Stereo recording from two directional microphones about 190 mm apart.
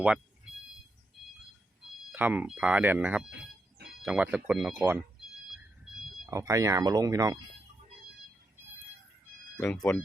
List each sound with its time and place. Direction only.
2.1 s speech: 10° right (ahead or behind)
6.3 s speech: 15° right (ahead or behind)
9.6 s speech: 5° left (ahead or behind)